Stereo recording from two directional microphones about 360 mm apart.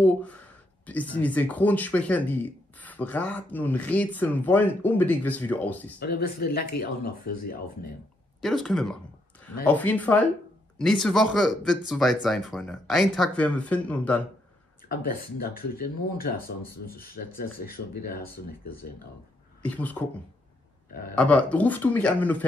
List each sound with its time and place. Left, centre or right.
0.0 s speech: centre
5.9 s speech: left
8.4 s speech: centre
14.9 s speech: left
19.6 s speech: centre
21.1 s speech: centre